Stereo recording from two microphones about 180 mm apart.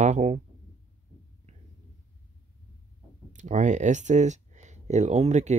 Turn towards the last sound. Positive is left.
turn(degrees=-40)  # may be behind; listen again after turning